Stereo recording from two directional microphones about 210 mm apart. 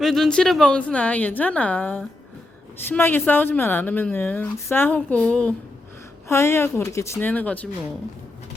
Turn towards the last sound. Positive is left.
turn(degrees=5)  # may be behind; listen again after turning